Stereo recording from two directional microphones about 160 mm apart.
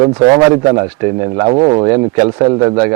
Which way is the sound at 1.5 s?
30° right (ahead or behind).